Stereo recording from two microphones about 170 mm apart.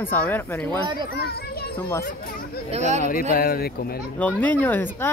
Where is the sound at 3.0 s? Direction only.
55° left (ahead or behind).